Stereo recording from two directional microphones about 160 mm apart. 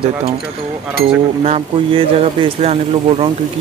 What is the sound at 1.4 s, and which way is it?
Speech, 40° right (ahead or behind).